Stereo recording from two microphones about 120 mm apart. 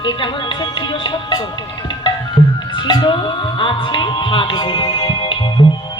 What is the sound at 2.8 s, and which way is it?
Music, 40° left (ahead or behind).